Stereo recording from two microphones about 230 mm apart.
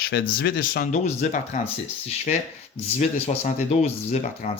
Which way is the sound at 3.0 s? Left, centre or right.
Left.